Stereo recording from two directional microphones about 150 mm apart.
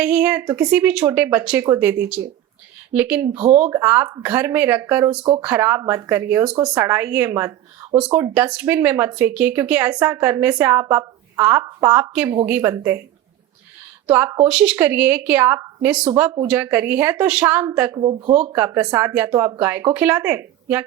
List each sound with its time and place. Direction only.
0.0 s speech: 10° right (ahead or behind)
3.3 s speech: 40° right (ahead or behind)
3.6 s speech: 15° right (ahead or behind)
7.9 s speech: 5° right (ahead or behind)
14.1 s speech: 15° right (ahead or behind)
17.9 s speech: 35° right (ahead or behind)
18.5 s speech: 15° right (ahead or behind)